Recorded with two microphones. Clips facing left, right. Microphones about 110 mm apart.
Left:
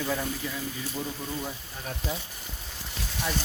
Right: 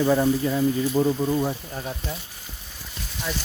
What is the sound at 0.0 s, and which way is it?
Speech, 45° right (ahead or behind).